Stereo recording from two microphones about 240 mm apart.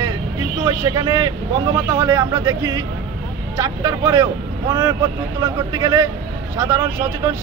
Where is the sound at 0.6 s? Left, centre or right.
Centre.